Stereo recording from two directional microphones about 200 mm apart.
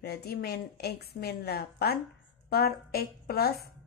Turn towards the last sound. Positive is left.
turn(degrees=50)  # may be behind; listen again after turning